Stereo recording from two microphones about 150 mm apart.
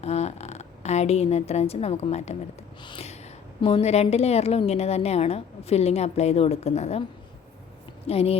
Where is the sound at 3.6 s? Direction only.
40° left (ahead or behind).